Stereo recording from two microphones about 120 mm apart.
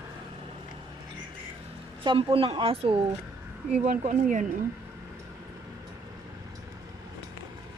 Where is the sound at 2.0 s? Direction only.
50° right (ahead or behind).